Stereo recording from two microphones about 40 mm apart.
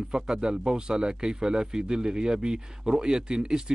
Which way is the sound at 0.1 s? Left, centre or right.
Centre.